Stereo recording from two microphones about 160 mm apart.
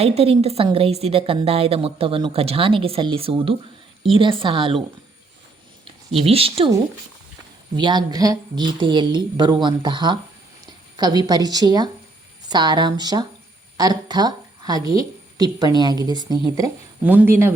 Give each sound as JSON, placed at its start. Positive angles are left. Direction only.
{"t": 0.0, "sound": "a woman's voice", "side_deg": -40}
{"t": 6.2, "sound": "a woman's voice", "side_deg": -35}
{"t": 7.8, "sound": "a woman's voice", "side_deg": -30}
{"t": 17.0, "sound": "speech", "side_deg": -10}